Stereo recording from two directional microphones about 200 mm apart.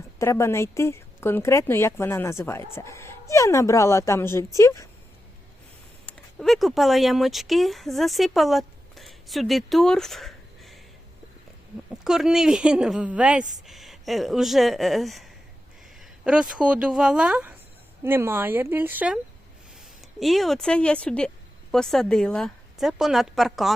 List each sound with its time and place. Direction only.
0.2 s a woman's voice: 15° left (ahead or behind)
6.1 s speech: centre (ahead or behind)
12.0 s a woman's voice: centre (ahead or behind)